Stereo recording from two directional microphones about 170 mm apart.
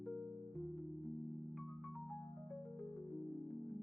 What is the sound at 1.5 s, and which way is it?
Music, centre (ahead or behind).